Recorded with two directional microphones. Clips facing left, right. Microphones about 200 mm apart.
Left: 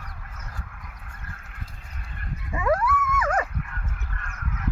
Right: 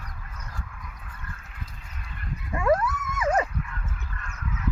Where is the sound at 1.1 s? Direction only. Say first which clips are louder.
Right 1 dB; 55° left (ahead or behind).